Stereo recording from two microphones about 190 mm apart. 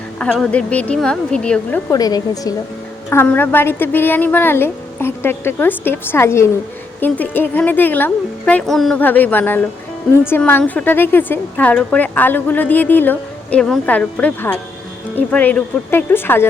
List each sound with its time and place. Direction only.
0.2 s a woman's voice: 5° left (ahead or behind)
1.9 s a woman's voice: 20° left (ahead or behind)